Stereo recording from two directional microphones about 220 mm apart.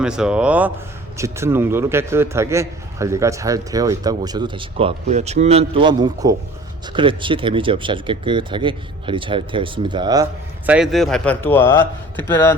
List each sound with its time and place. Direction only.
0.0 s a man's voice: 5° right (ahead or behind); by 10.2 s 20° right (ahead or behind)
10.7 s speech: centre (ahead or behind)